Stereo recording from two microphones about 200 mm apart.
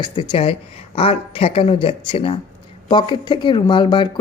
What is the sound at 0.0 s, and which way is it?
A man's voice, 25° left (ahead or behind).